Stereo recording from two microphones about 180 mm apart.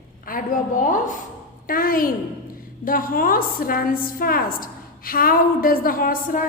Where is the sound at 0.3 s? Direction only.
50° left (ahead or behind).